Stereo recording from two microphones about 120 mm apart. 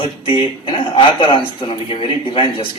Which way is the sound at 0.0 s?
45° left (ahead or behind).